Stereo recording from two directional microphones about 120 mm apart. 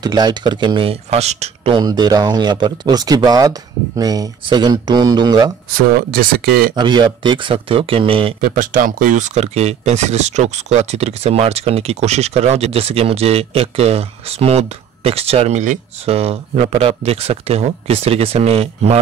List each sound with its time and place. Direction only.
0.0 s speech: 35° right (ahead or behind)
1.1 s speech: 65° right (ahead or behind)
1.7 s speech: 35° right (ahead or behind)
6.7 s speech: 40° right (ahead or behind)
8.8 s speech: 90° right; by 18.9 s 60° right (ahead or behind)